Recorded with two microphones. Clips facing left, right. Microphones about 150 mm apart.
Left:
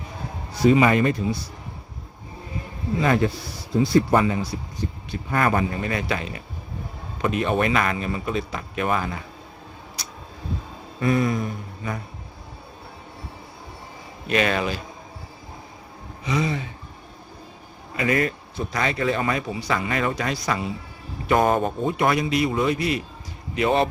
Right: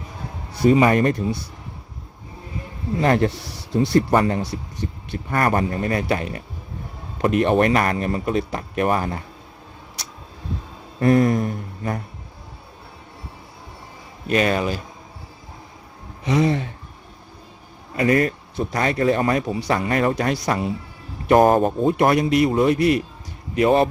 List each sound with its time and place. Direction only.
0.7 s speech: 40° right (ahead or behind); by 1.5 s 55° right (ahead or behind)
3.2 s speech: 70° right (ahead or behind)
4.2 s speech: 50° right (ahead or behind)
7.2 s speech: 60° right (ahead or behind); by 9.2 s 45° right (ahead or behind)
11.0 s a sound: 55° right (ahead or behind)
14.3 s speech: 40° right (ahead or behind)
16.2 s speech: 65° right (ahead or behind)
17.9 s speech: 40° right (ahead or behind)
22.8 s a man's voice: 60° right (ahead or behind)
23.6 s speech: 40° right (ahead or behind)